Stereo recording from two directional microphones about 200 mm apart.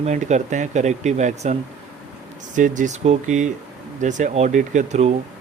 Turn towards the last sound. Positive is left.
turn(degrees=-35)  # may be behind; listen again after turning